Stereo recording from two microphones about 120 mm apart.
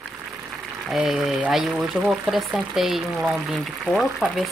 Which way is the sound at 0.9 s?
5° right (ahead or behind).